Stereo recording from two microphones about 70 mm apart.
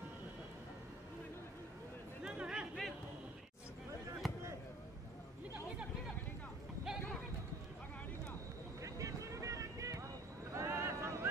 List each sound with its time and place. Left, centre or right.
2.2 s chatter: centre
4.2 s basketball bounce: centre
8.8 s vehicle: right
10.5 s a sound: right